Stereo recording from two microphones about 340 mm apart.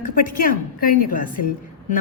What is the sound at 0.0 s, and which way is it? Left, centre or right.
A woman's voice, left.